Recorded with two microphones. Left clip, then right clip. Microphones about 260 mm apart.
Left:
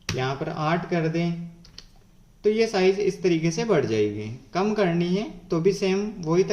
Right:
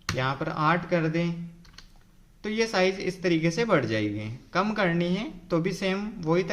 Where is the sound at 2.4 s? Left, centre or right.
Right.